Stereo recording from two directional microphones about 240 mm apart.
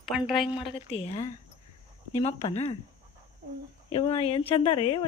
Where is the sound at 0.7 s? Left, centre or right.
Left.